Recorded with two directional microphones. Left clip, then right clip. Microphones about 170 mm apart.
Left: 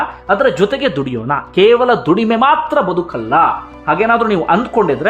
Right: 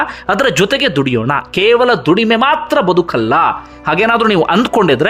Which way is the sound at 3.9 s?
20° right (ahead or behind).